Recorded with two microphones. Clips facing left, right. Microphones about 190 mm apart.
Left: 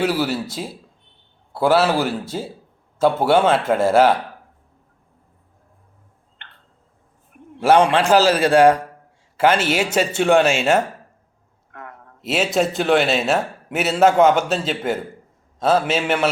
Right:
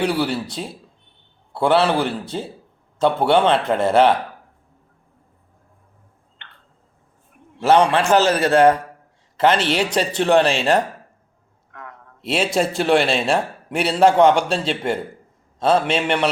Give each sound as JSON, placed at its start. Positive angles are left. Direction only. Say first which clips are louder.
{"t": 0.0, "sound": "a man's voice", "louder": "even", "side_deg": 5}
{"t": 7.6, "sound": "a man's voice", "louder": "left 1 dB", "side_deg": 10}
{"t": 11.7, "sound": "a sound", "louder": "left 1 dB", "side_deg": 45}
{"t": 12.2, "sound": "a man's voice", "louder": "even", "side_deg": 5}